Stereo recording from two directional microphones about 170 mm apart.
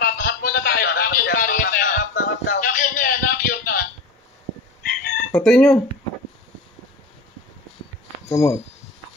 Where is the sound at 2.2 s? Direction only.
90° left.